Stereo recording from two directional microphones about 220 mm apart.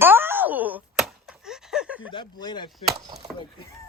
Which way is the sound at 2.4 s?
20° left (ahead or behind).